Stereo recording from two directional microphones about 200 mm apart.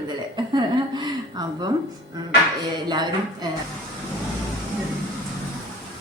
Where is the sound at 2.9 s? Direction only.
20° right (ahead or behind).